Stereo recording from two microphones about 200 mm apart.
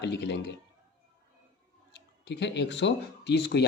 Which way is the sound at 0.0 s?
60° left (ahead or behind).